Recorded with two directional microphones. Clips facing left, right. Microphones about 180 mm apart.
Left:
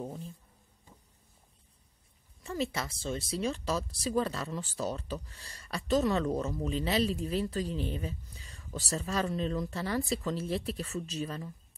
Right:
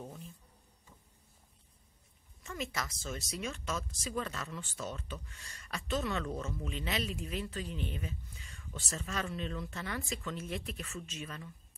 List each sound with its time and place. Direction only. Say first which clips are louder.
0.0 s speech: left 7 dB; 35° left (ahead or behind)
2.4 s speech: left 6 dB; 30° left (ahead or behind)